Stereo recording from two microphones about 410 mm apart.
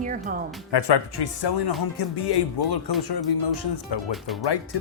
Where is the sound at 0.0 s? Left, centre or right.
Centre.